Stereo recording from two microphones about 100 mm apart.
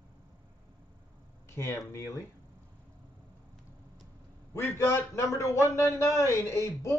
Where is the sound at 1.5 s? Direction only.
30° left (ahead or behind).